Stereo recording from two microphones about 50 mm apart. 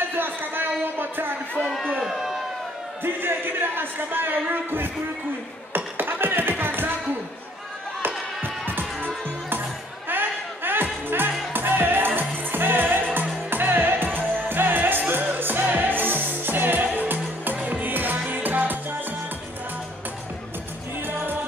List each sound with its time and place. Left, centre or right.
0.1 s a sound: right
1.7 s speech: centre
2.0 s speech: centre
3.0 s speech: right
5.9 s beatboxing: right
6.5 s a sound: right
8.0 s music: right